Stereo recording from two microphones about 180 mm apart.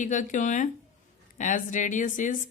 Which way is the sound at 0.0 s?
45° left (ahead or behind).